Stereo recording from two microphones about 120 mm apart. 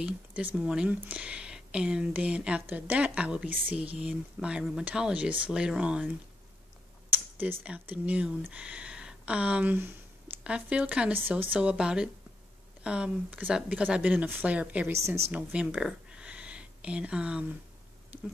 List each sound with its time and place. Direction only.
0.0 s speech: 15° right (ahead or behind)
7.1 s a sound: 15° right (ahead or behind)
7.6 s speech: 10° right (ahead or behind)